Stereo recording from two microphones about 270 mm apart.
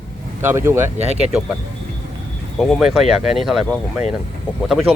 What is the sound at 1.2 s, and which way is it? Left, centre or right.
Speech, centre.